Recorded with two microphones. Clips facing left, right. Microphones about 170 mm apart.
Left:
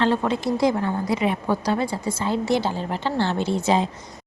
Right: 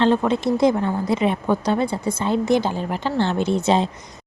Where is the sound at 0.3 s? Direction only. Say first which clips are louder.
Right 3 dB; 25° right (ahead or behind).